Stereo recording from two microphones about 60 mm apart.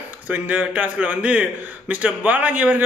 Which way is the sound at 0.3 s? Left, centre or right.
Right.